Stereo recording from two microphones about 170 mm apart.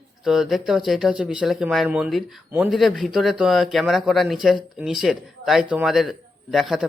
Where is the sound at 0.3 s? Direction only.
Centre (ahead or behind).